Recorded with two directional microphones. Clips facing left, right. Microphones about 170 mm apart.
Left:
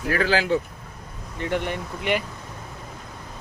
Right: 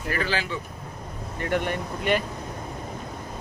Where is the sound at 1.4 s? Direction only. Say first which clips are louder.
Even; 20° left (ahead or behind).